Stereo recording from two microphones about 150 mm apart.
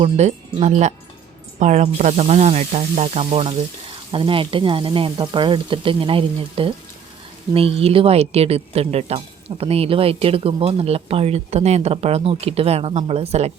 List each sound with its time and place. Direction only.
0.2 s speech: 50° right (ahead or behind)